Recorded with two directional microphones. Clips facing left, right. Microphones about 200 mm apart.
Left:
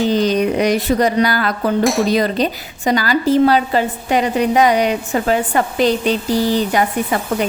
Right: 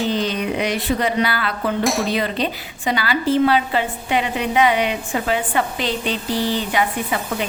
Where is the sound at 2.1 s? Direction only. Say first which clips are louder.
Left 5 dB; 40° left (ahead or behind).